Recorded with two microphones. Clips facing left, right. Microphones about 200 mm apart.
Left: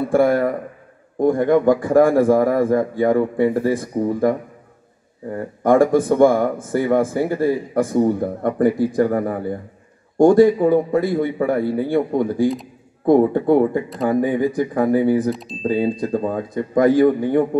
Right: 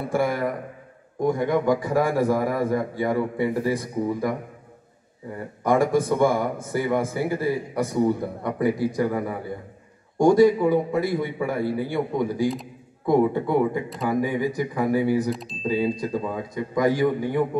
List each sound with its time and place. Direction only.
0.1 s a man's voice: 55° left (ahead or behind)
5.6 s a man's voice: 55° left (ahead or behind)
15.2 s speech: centre (ahead or behind)
15.6 s a man's voice: 50° left (ahead or behind)